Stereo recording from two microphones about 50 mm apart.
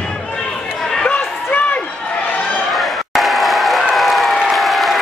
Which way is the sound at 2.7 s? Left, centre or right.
Centre.